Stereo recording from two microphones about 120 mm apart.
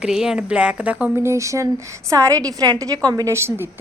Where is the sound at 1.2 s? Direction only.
25° right (ahead or behind).